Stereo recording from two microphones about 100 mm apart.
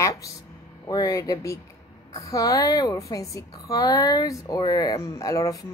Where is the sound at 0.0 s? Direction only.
35° left (ahead or behind).